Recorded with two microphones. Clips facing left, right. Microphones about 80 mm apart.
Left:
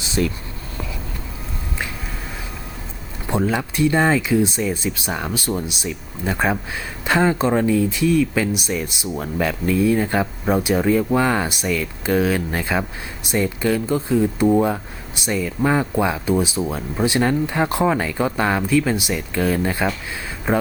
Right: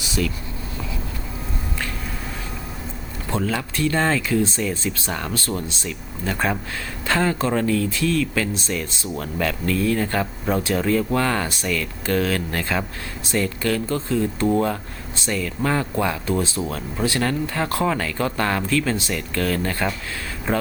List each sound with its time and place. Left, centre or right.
0.1 s speech: left
3.2 s speech: centre